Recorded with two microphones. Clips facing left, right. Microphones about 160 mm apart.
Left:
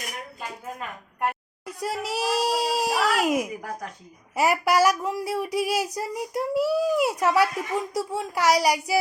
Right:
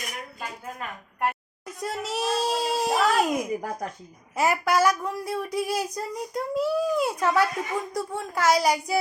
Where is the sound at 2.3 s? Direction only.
75° left (ahead or behind).